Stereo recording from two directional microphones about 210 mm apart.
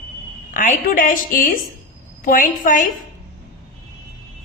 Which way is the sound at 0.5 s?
40° left (ahead or behind).